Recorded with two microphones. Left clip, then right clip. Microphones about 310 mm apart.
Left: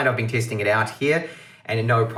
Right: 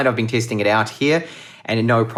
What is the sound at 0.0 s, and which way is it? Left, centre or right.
Speech, centre.